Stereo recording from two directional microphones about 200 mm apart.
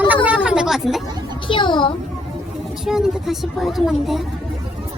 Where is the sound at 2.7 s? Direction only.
Centre (ahead or behind).